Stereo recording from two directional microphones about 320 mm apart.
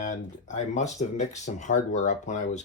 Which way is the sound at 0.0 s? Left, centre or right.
Left.